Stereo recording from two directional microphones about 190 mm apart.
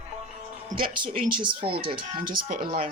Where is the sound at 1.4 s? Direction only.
25° right (ahead or behind).